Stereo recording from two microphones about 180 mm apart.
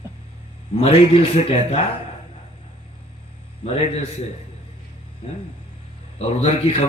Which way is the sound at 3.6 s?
35° left (ahead or behind).